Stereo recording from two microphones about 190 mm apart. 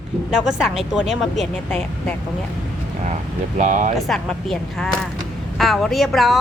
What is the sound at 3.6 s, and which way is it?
Speech, 40° right (ahead or behind).